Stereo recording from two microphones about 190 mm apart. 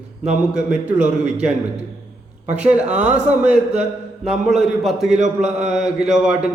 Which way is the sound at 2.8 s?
40° right (ahead or behind).